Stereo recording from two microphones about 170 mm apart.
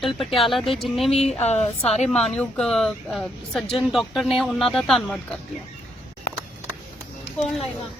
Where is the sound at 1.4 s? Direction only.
40° left (ahead or behind).